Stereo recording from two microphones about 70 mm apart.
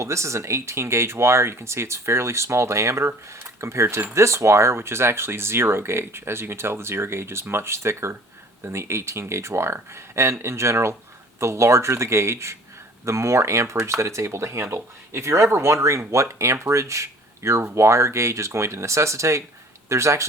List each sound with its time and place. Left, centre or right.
0.0 s speech: right